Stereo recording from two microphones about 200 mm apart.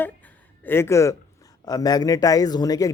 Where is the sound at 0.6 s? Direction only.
10° left (ahead or behind).